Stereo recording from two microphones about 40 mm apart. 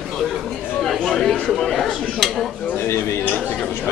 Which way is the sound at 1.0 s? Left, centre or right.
Centre.